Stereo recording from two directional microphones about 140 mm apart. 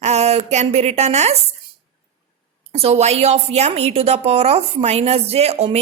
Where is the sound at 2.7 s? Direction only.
45° right (ahead or behind).